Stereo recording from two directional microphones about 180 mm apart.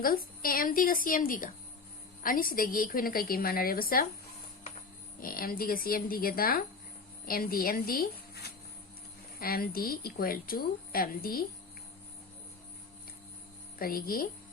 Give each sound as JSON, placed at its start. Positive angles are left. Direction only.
{"t": 0.0, "sound": "a woman's voice", "side_deg": 55}
{"t": 5.2, "sound": "a woman's voice", "side_deg": 55}
{"t": 13.7, "sound": "a woman's voice", "side_deg": 55}